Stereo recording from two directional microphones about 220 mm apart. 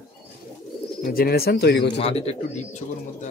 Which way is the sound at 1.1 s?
45° left (ahead or behind).